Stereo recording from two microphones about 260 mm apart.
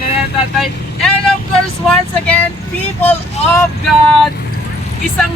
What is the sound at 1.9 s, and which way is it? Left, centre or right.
Speech, centre.